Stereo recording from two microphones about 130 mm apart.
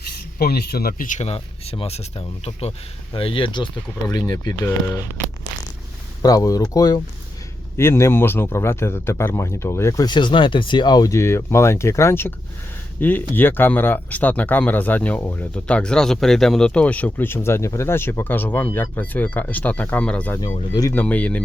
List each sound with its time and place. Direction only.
0.9 s speech: 90° left
1.2 s speech: 50° left (ahead or behind); by 4.5 s 30° left (ahead or behind)
6.2 s speech: 25° left (ahead or behind)
10.1 s speech: 35° left (ahead or behind); by 21.4 s 10° left (ahead or behind)